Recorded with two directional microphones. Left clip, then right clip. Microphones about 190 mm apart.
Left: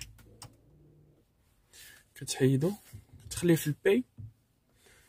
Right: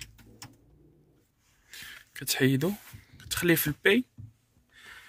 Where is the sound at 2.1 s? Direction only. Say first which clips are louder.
Right 2 dB; 15° left (ahead or behind).